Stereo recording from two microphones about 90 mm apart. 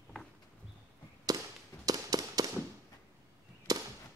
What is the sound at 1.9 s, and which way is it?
Fireworks, 45° right (ahead or behind).